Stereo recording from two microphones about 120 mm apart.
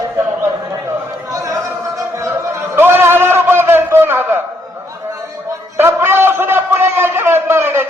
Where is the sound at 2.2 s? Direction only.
20° right (ahead or behind).